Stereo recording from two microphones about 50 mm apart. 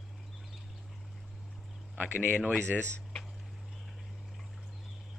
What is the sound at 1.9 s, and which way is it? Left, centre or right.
Speech, right.